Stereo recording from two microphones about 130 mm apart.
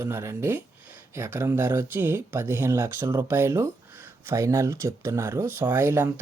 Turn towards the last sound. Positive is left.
turn(degrees=-15)  # may be behind; listen again after turning